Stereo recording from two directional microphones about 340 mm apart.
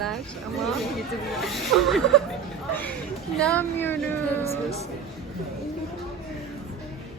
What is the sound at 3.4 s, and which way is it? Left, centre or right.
Speech, centre.